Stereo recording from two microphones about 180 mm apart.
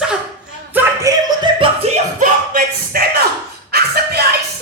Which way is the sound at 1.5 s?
30° right (ahead or behind).